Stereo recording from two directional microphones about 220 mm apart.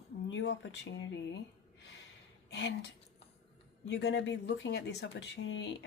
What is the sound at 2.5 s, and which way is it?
Speech, 50° left (ahead or behind).